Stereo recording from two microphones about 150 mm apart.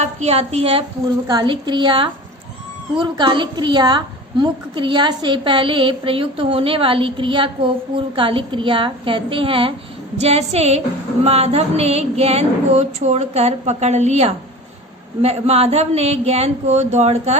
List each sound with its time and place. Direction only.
0.0 s speech: 45° right (ahead or behind)
1.3 s a woman's voice: 30° right (ahead or behind); by 17.3 s 45° right (ahead or behind)